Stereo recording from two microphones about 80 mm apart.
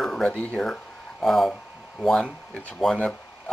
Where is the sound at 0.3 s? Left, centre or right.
Centre.